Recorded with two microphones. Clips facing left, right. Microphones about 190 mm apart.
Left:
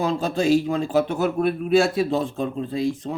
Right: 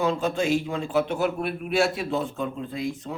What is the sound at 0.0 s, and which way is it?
A man's voice, 35° left (ahead or behind).